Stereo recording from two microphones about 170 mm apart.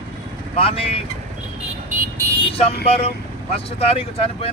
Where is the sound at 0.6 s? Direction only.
35° left (ahead or behind).